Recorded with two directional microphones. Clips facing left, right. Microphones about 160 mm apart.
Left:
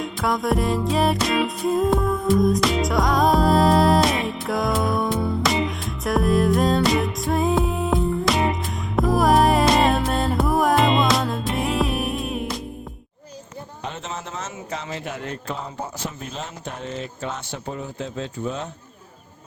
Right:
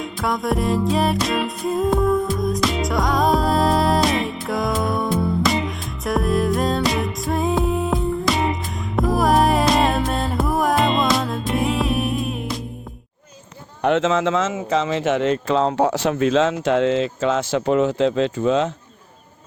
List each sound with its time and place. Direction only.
0.0 s music: centre (ahead or behind)
13.8 s speech: 85° right